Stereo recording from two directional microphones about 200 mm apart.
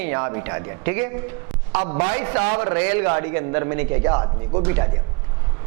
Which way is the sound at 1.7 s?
30° right (ahead or behind).